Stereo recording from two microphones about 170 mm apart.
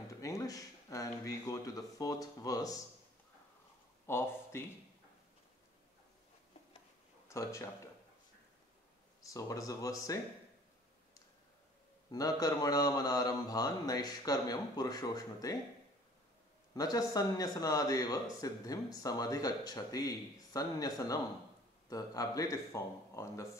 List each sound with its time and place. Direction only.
0.2 s speech: 20° left (ahead or behind)
4.0 s speech: 15° left (ahead or behind)
7.2 s speech: 15° left (ahead or behind)
9.2 s speech: 20° left (ahead or behind)
12.1 s speech: 20° left (ahead or behind)
16.7 s speech: 20° left (ahead or behind)